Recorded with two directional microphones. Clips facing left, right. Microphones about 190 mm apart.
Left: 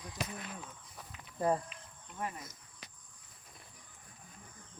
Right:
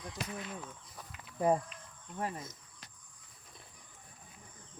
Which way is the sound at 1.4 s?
15° right (ahead or behind).